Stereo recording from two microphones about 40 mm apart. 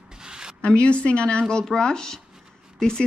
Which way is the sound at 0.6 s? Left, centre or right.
Left.